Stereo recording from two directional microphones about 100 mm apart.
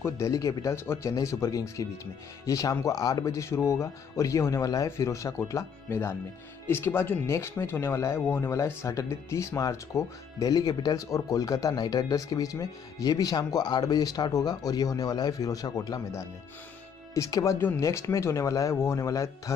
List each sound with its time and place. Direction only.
0.0 s speech: 30° left (ahead or behind)